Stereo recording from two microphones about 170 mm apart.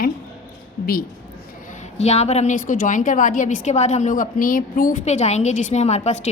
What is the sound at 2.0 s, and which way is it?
A woman's voice, 40° left (ahead or behind).